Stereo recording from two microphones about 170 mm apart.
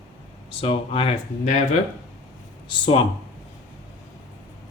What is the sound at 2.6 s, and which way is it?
Speech, 30° left (ahead or behind).